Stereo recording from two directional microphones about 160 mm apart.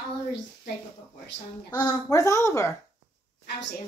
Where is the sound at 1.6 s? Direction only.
25° left (ahead or behind).